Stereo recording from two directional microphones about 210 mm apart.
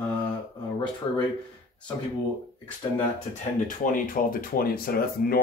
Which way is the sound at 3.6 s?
40° left (ahead or behind).